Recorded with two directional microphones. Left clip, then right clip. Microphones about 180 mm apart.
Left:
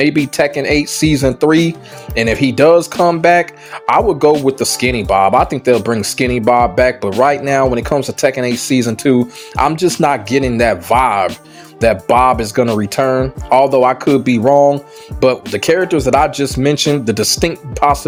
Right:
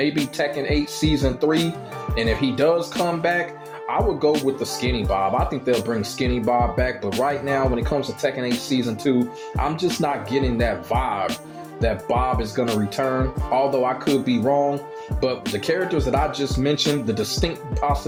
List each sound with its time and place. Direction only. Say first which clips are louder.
0.3 s speech: left 9 dB; 45° left (ahead or behind)